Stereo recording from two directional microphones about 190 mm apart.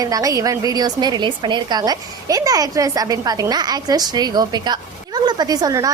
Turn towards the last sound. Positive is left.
turn(degrees=-20)  # may be behind; listen again after turning